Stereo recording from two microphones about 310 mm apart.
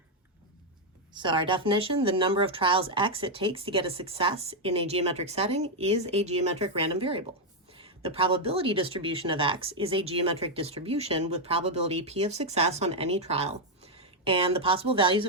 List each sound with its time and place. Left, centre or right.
1.1 s speech: centre